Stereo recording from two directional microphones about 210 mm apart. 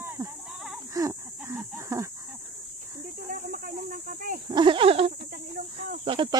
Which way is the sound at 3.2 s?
40° right (ahead or behind).